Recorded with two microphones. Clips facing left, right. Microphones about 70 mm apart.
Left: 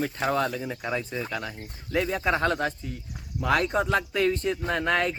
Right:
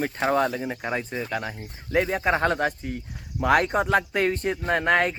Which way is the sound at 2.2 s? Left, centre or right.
Right.